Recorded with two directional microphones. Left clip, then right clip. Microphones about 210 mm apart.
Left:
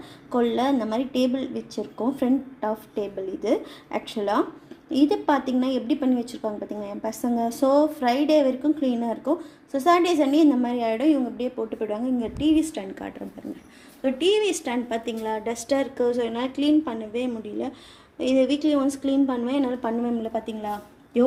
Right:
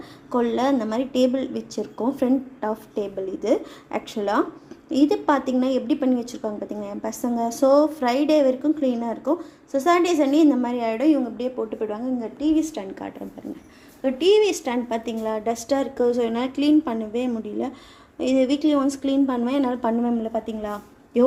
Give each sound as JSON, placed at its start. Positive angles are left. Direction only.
{"t": 0.3, "sound": "a woman's voice", "side_deg": 0}
{"t": 12.8, "sound": "a woman's voice", "side_deg": 0}
{"t": 18.4, "sound": "speech", "side_deg": -35}
{"t": 19.0, "sound": "a woman's voice", "side_deg": -5}